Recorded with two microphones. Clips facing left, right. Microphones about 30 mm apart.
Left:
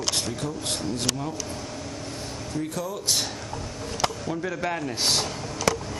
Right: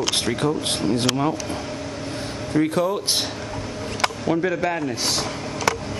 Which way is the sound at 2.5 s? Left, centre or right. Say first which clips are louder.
Right 11 dB; right.